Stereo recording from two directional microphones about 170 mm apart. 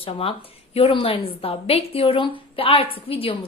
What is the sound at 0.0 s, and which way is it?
A woman's voice, 35° left (ahead or behind).